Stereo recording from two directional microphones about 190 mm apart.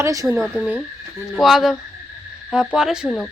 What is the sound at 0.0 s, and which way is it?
Speech, 15° right (ahead or behind).